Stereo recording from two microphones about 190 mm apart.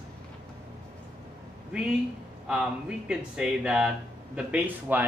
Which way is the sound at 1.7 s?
5° right (ahead or behind).